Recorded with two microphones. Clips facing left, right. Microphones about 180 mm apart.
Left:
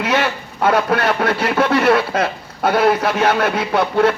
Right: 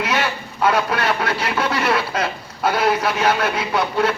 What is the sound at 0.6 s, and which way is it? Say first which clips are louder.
Speech: left 3 dB; 50° left (ahead or behind).